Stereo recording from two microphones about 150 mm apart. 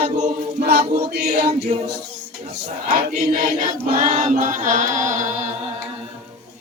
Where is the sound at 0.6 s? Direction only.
90° right.